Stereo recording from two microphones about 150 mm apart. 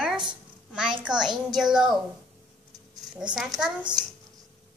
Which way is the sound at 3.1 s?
5° right (ahead or behind).